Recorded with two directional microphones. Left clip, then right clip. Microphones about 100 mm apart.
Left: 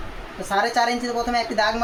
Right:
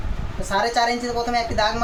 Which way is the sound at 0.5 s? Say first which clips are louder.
Even; 20° right (ahead or behind).